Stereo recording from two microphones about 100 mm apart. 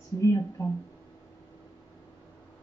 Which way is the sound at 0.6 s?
35° left (ahead or behind).